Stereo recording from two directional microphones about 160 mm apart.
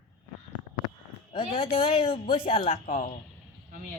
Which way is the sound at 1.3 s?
35° left (ahead or behind).